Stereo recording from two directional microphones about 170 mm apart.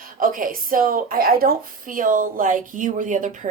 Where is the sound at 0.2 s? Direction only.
55° right (ahead or behind).